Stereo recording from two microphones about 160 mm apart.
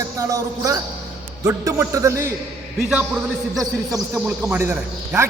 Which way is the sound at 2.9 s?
5° right (ahead or behind).